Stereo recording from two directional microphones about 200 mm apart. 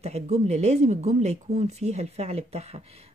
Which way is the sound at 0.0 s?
35° right (ahead or behind).